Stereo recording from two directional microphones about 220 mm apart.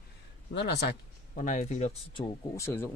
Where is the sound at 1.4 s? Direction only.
35° left (ahead or behind).